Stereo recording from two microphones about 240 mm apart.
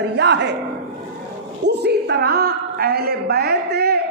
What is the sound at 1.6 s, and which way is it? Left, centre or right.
A man's voice, right.